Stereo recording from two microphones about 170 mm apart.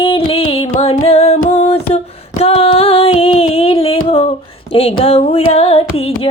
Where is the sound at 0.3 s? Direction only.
35° left (ahead or behind).